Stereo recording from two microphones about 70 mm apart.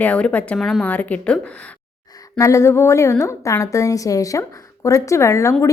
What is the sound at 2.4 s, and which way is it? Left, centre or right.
A woman's voice, left.